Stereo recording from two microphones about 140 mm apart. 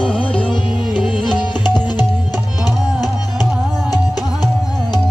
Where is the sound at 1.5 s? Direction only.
30° left (ahead or behind).